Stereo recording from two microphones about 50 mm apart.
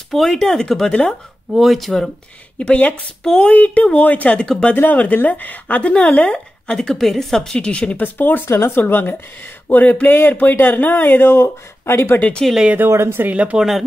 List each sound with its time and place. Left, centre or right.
0.1 s a woman's voice: centre
1.5 s speech: centre
2.6 s speech: left
4.4 s speech: left
5.1 s speech: left
6.8 s a woman's voice: centre
7.5 s speech: left
8.0 s speech: left
8.5 s speech: left
8.7 s speech: left
12.4 s a woman's voice: centre
12.9 s speech: right
13.3 s speech: right
13.6 s speech: centre